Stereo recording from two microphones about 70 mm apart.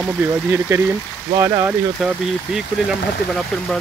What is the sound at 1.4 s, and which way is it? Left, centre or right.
Speech, right.